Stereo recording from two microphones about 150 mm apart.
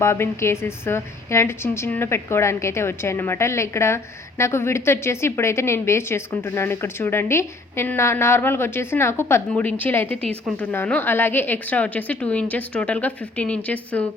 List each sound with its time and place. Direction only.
0.0 s a woman's voice: 15° left (ahead or behind)